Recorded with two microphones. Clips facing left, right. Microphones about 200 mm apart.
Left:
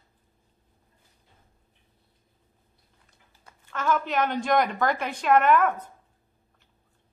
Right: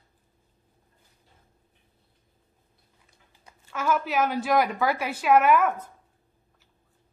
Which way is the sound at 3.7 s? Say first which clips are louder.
Even; 10° right (ahead or behind).